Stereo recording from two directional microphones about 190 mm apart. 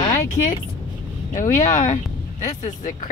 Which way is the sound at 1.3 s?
40° left (ahead or behind).